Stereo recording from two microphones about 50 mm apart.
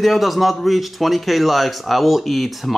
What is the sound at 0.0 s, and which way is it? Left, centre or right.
A man's voice, centre.